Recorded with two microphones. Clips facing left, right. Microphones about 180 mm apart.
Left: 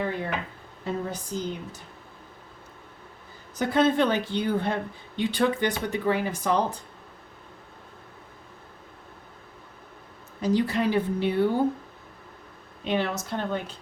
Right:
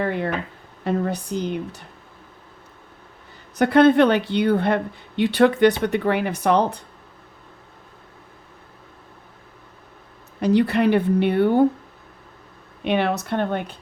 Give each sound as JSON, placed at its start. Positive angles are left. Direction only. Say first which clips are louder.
{"t": 0.0, "sound": "music", "louder": "right 5 dB", "side_deg": -70}
{"t": 0.9, "sound": "speech", "louder": "right 7 dB", "side_deg": -70}
{"t": 3.6, "sound": "speech", "louder": "right 8 dB", "side_deg": -65}
{"t": 10.4, "sound": "speech", "louder": "right 6 dB", "side_deg": -65}
{"t": 12.8, "sound": "speech", "louder": "right 6 dB", "side_deg": -65}